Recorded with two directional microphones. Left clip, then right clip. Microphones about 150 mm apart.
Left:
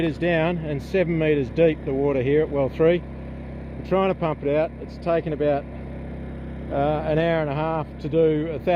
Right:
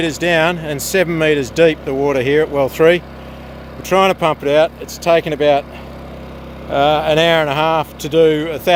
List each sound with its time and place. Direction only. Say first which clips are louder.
0.0 s speech: right 8 dB; 15° right (ahead or behind)
6.7 s speech: right 10 dB; 25° right (ahead or behind)